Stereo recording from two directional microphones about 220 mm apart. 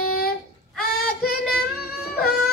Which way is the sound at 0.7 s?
45° left (ahead or behind).